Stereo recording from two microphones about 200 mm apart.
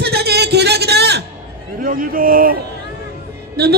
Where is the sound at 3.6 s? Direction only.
55° right (ahead or behind).